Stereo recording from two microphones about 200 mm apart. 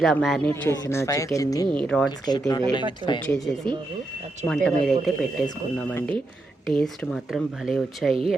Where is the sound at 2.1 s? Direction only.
20° left (ahead or behind).